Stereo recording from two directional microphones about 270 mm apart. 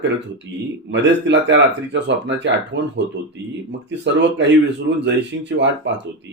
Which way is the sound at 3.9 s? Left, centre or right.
Right.